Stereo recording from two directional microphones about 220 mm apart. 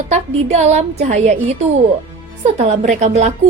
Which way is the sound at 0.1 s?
30° right (ahead or behind).